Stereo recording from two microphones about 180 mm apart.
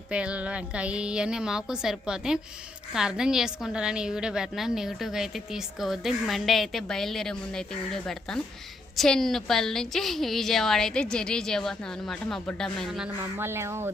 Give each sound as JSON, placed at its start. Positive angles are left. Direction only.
{"t": 0.1, "sound": "a woman's voice", "side_deg": -5}
{"t": 13.4, "sound": "speech", "side_deg": -15}